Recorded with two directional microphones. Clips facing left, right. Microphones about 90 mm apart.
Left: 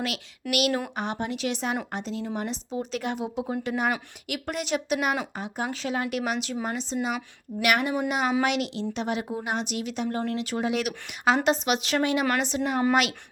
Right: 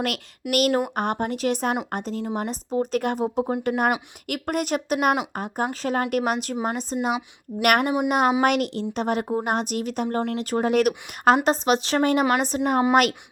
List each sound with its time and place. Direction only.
0.5 s speech: 45° right (ahead or behind)
11.4 s speech: 40° right (ahead or behind)